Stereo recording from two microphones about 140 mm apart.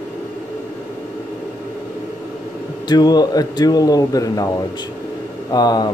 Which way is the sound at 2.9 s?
30° left (ahead or behind).